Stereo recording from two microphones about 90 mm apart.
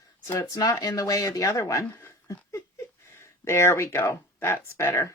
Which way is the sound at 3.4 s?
30° left (ahead or behind).